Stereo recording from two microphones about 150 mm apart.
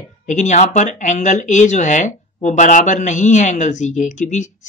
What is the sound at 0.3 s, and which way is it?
Speech, 55° left (ahead or behind).